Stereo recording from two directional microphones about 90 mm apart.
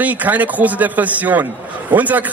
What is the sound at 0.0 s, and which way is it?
A man's voice, 20° right (ahead or behind).